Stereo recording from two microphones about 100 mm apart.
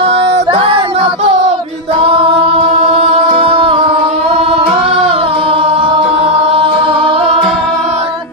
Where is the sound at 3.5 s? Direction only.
65° right (ahead or behind).